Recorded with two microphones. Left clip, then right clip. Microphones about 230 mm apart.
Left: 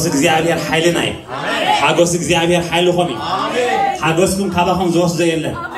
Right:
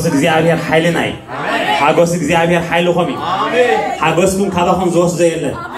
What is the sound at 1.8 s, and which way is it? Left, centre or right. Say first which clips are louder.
A man's voice: right 2 dB; centre.